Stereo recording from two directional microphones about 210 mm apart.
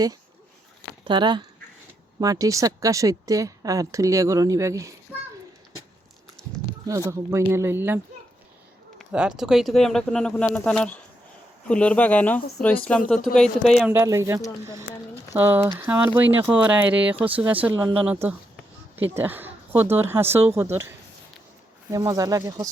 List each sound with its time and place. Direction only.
1.0 s a woman's voice: 20° right (ahead or behind)
6.8 s a woman's voice: 15° right (ahead or behind)
9.0 s speech: 5° right (ahead or behind)
13.9 s a woman's voice: 15° right (ahead or behind)
21.9 s a woman's voice: 15° right (ahead or behind)